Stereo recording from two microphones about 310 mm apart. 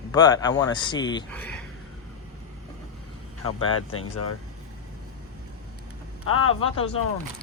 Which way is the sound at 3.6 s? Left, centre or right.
Left.